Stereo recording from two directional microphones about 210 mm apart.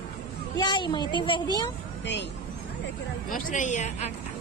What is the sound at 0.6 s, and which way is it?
A child's voice, 20° left (ahead or behind).